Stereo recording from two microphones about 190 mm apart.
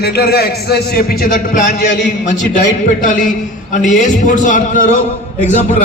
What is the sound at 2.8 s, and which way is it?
A man's voice, 45° left (ahead or behind).